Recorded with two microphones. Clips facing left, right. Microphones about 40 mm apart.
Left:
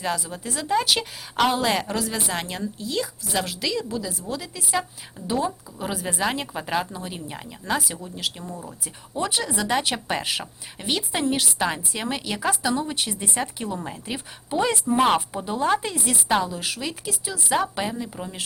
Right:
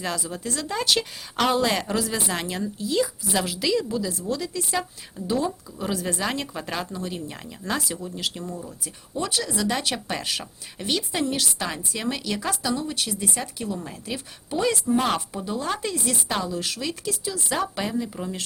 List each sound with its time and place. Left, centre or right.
0.0 s speech: centre
8.4 s speech: centre